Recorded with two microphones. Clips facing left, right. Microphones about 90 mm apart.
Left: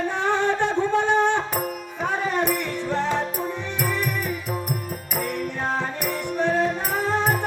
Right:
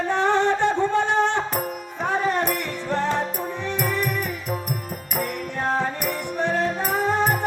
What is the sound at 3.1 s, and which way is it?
Music, 15° right (ahead or behind).